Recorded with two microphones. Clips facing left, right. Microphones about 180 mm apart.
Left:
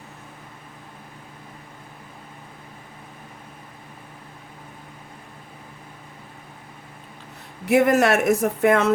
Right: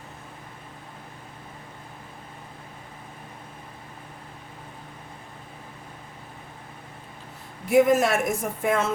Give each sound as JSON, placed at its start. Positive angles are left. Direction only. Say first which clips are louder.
{"t": 7.6, "sound": "speech", "louder": "left 1 dB", "side_deg": 70}